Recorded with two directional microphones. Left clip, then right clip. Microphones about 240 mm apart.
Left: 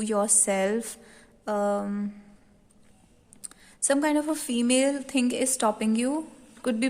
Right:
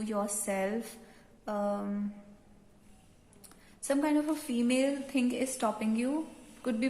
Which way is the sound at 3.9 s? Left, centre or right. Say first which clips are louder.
Left 5 dB; left.